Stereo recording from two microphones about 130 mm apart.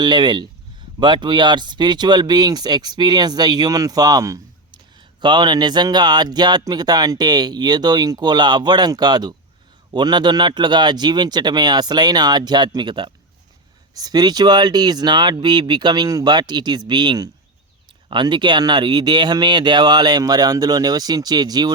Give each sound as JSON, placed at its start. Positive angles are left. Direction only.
{"t": 0.0, "sound": "speech", "side_deg": -35}